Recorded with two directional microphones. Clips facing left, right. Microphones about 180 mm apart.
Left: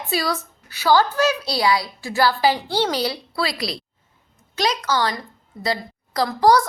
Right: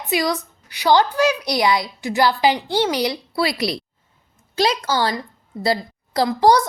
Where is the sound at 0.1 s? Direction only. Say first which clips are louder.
Right 3 dB; 15° right (ahead or behind).